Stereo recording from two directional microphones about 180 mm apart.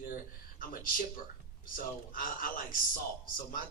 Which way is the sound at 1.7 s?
50° left (ahead or behind).